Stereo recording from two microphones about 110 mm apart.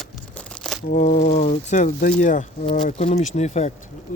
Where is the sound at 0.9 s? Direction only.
90° left.